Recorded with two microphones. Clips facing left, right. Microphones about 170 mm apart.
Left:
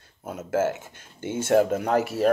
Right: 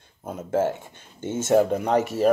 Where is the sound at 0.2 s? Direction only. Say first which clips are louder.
Right 1 dB; 30° right (ahead or behind).